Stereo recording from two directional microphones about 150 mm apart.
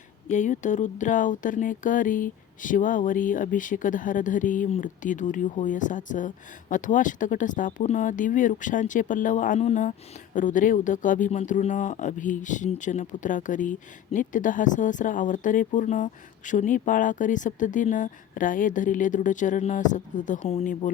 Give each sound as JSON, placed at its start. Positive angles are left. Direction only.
{"t": 0.3, "sound": "speech", "side_deg": 55}
{"t": 9.6, "sound": "speech", "side_deg": 50}
{"t": 10.3, "sound": "speech", "side_deg": 60}